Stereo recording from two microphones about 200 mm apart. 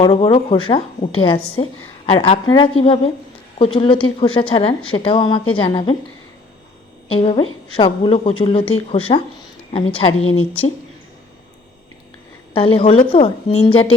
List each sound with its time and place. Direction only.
0.2 s a woman's voice: 25° left (ahead or behind)
7.1 s a woman's voice: 25° left (ahead or behind)
12.5 s a woman's voice: 25° left (ahead or behind)